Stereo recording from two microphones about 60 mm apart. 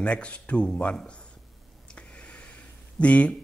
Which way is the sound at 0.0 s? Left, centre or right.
Centre.